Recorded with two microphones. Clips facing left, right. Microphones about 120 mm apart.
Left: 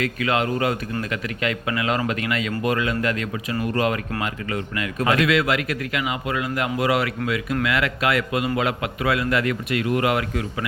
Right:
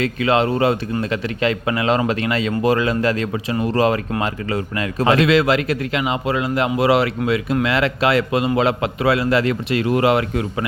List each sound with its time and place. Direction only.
0.0 s a man's voice: 30° right (ahead or behind)